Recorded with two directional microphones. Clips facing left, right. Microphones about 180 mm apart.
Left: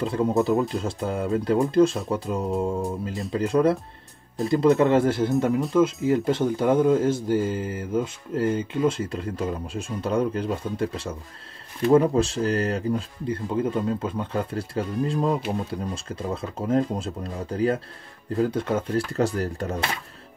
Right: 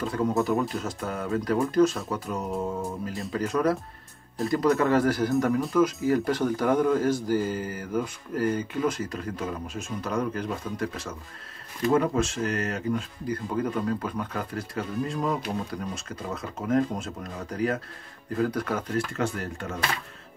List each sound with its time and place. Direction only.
0.0 s speech: 25° left (ahead or behind)
0.3 s speech: centre (ahead or behind)
0.7 s speech: 25° left (ahead or behind)